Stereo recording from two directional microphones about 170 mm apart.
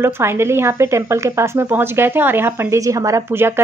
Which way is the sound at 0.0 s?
15° right (ahead or behind).